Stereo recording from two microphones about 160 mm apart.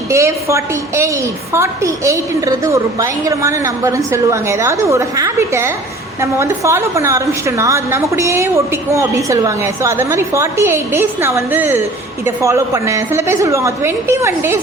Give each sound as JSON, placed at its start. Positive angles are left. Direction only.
{"t": 0.1, "sound": "a woman's voice", "side_deg": -20}